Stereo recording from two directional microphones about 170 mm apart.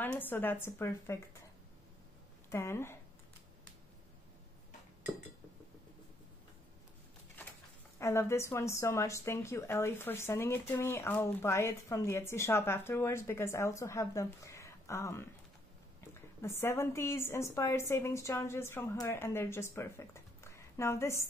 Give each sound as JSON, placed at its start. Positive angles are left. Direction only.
{"t": 0.0, "sound": "a woman's voice", "side_deg": 10}
{"t": 2.5, "sound": "a woman's voice", "side_deg": 15}
{"t": 7.4, "sound": "a sound", "side_deg": 10}
{"t": 8.0, "sound": "a woman's voice", "side_deg": 15}